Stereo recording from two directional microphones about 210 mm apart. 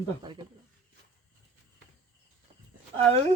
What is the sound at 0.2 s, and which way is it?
Speech, 20° right (ahead or behind).